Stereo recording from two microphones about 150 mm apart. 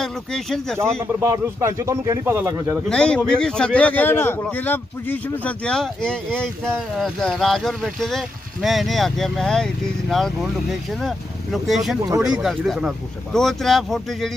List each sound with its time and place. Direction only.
0.0 s a man's voice: 5° left (ahead or behind)
1.2 s speech: 20° right (ahead or behind)
2.9 s a man's voice: 5° left (ahead or behind)